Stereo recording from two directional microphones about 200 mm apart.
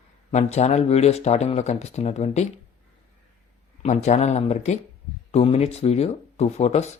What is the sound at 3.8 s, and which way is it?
Speech, 35° left (ahead or behind).